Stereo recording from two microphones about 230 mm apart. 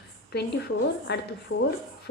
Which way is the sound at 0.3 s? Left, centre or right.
Left.